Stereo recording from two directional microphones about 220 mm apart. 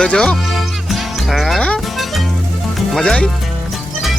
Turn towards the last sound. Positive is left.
turn(degrees=5)  # may be behind; listen again after turning